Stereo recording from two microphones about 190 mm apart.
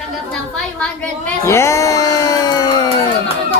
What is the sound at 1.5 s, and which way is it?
Music, 15° left (ahead or behind).